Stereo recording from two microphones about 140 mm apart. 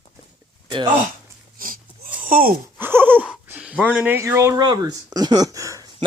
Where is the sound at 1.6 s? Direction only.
85° right.